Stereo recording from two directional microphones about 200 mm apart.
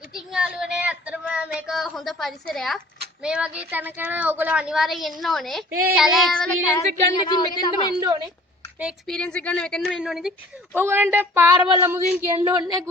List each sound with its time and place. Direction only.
0.1 s child singing: 5° right (ahead or behind)
3.2 s a woman's voice: 5° right (ahead or behind)
6.7 s a woman's voice: 20° left (ahead or behind)
7.9 s a woman's voice: 20° right (ahead or behind)
8.8 s a woman's voice: centre (ahead or behind); by 12.8 s 20° right (ahead or behind)